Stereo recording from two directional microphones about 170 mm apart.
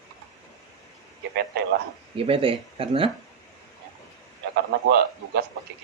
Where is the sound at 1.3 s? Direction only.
75° right (ahead or behind).